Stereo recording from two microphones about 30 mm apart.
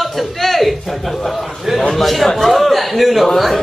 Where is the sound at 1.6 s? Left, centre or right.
Centre.